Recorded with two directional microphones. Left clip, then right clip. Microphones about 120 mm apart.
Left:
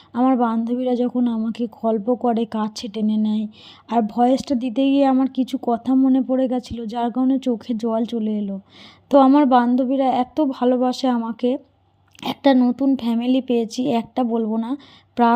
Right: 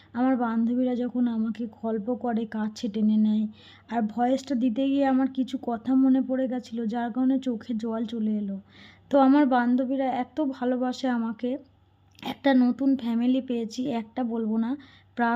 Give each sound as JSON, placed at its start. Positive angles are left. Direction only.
{"t": 0.1, "sound": "a woman's voice", "side_deg": 40}